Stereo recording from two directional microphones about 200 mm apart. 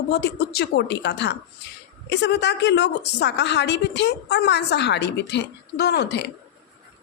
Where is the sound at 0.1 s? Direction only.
55° left (ahead or behind).